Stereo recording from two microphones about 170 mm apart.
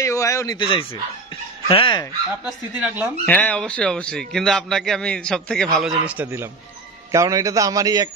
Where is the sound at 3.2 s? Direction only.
10° left (ahead or behind).